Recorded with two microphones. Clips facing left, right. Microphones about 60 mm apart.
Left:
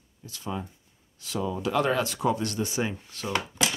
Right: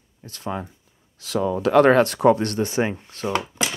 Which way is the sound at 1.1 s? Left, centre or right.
Right.